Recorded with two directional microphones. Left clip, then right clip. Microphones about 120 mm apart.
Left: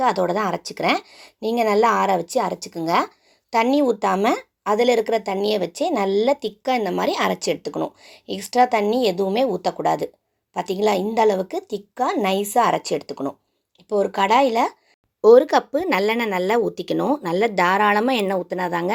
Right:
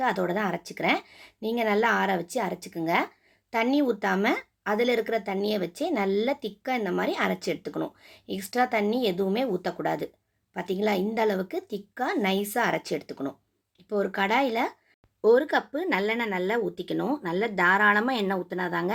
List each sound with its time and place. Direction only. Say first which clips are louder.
0.0 s speech: left 7 dB; 35° left (ahead or behind)
15.2 s speech: left 9 dB; 50° left (ahead or behind)